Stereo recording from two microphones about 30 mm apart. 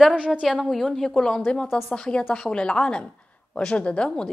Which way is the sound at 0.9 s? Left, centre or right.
Centre.